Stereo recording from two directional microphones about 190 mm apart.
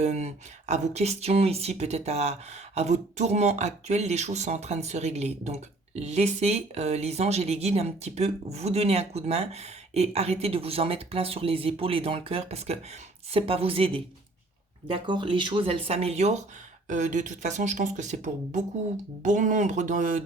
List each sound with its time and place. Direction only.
0.0 s speech: 35° right (ahead or behind)